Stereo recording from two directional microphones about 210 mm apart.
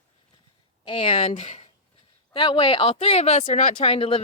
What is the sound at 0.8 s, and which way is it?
Speech, 25° left (ahead or behind).